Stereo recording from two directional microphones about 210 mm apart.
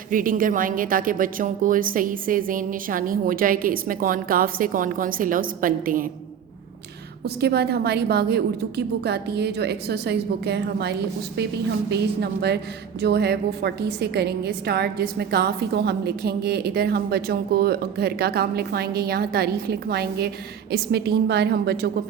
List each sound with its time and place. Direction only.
0.1 s a woman's voice: 40° right (ahead or behind)
7.4 s a woman's voice: 50° right (ahead or behind)